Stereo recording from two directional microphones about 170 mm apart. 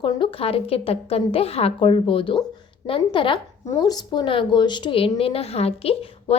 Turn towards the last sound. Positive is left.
turn(degrees=35)  # may be behind; listen again after turning